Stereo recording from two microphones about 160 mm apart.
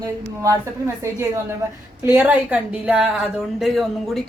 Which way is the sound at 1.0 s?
15° right (ahead or behind).